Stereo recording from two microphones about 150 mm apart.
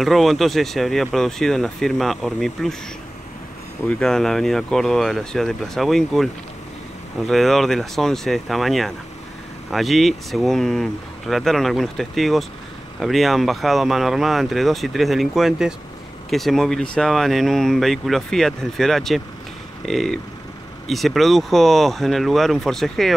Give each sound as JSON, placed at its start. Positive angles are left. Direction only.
{"t": 0.0, "sound": "speech", "side_deg": 0}
{"t": 4.0, "sound": "speech", "side_deg": 5}